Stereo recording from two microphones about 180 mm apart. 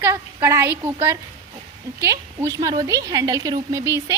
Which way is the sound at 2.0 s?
15° right (ahead or behind).